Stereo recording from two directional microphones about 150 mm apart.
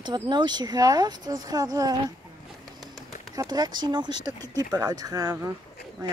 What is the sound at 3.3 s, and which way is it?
Speech, 25° right (ahead or behind).